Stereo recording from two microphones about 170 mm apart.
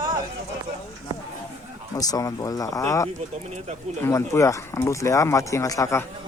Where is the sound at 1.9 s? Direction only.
20° left (ahead or behind).